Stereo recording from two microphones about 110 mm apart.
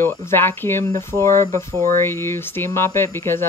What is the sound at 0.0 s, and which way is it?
Speech, 25° left (ahead or behind).